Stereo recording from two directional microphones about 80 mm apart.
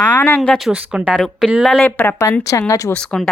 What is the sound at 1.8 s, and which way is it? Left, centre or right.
Speech, left.